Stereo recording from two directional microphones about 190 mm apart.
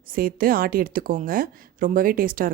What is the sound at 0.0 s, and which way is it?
A woman's voice, 50° right (ahead or behind).